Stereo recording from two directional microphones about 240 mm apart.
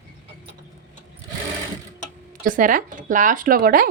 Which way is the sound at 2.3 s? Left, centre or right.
Right.